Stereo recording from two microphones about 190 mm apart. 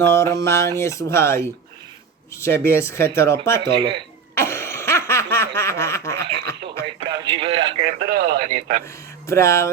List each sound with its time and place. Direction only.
0.0 s speech: 15° left (ahead or behind)
3.6 s speech: 25° right (ahead or behind)
4.4 s laughter: 15° left (ahead or behind)
6.8 s a sound: 25° right (ahead or behind)
7.9 s radio: 50° right (ahead or behind)
9.2 s speech: 15° left (ahead or behind)